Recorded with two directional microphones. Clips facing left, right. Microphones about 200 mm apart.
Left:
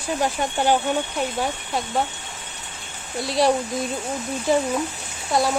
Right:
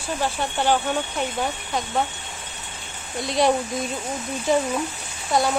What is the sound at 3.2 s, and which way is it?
Speech, centre (ahead or behind).